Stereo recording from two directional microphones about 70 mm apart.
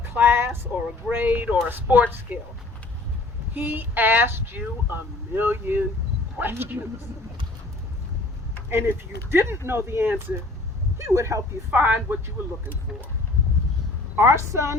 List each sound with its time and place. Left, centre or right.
0.0 s a sound: right
1.1 s speech: right
3.5 s speech: right
8.7 s speech: right
10.9 s a woman's voice: right
11.7 s speech: right
14.2 s a woman's voice: right